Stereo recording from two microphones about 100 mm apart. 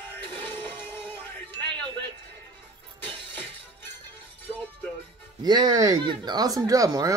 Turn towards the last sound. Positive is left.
turn(degrees=-35)  # may be behind; listen again after turning